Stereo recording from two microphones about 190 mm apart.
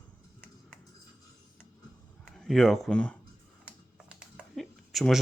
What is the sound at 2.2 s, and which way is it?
Speech, centre (ahead or behind).